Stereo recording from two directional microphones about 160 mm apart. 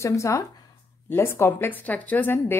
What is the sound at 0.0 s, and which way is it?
Speech, 20° left (ahead or behind).